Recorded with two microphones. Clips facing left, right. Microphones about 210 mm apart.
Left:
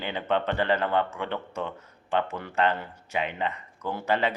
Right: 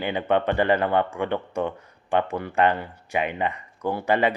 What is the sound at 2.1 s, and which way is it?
Speech, 15° right (ahead or behind).